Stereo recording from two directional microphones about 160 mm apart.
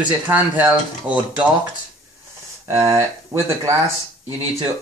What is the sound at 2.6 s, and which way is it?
Speech, 20° right (ahead or behind).